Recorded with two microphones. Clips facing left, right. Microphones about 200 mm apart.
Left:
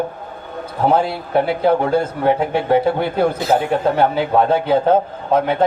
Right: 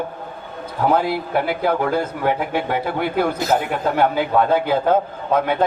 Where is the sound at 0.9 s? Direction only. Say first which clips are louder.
Left 1 dB; 30° left (ahead or behind).